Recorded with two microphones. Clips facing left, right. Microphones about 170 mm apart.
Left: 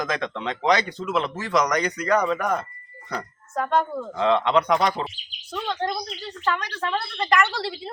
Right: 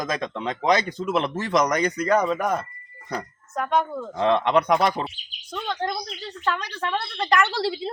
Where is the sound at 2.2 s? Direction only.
5° right (ahead or behind).